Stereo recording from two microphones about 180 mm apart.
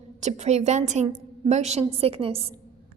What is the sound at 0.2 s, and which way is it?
A woman's voice, 40° right (ahead or behind).